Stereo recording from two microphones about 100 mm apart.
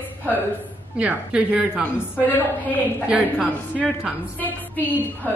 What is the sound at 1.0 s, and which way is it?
Speech, 10° right (ahead or behind).